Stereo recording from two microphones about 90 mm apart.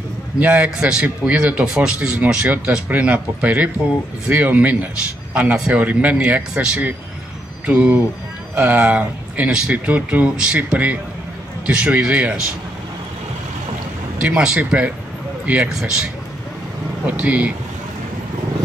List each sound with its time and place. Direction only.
0.4 s speech: 15° right (ahead or behind)
14.2 s speech: 15° right (ahead or behind)